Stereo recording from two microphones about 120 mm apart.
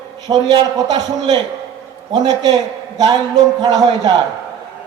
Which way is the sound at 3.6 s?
35° right (ahead or behind).